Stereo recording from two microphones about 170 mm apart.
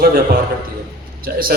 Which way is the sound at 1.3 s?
70° right (ahead or behind).